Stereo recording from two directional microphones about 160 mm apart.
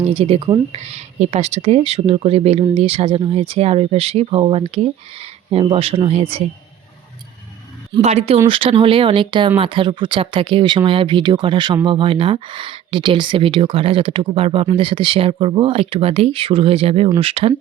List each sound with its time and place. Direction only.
0.1 s speech: 40° right (ahead or behind)
0.8 s speech: 45° right (ahead or behind)
8.0 s speech: 40° right (ahead or behind)